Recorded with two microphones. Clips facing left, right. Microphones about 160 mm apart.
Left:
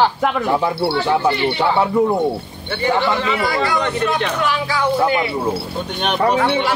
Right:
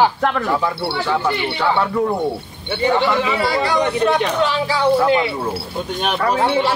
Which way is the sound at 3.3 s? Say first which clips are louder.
Right 1 dB; 30° right (ahead or behind).